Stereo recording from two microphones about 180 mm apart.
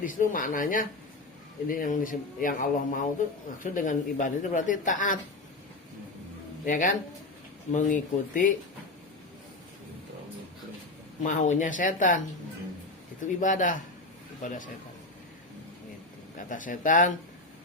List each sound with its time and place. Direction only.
0.0 s speech: 50° left (ahead or behind)
6.7 s speech: 45° left (ahead or behind)
11.2 s speech: 45° left (ahead or behind)
13.2 s speech: 45° left (ahead or behind)
16.5 s speech: 45° left (ahead or behind)